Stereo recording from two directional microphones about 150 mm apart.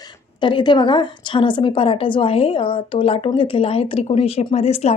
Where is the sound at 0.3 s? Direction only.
30° left (ahead or behind).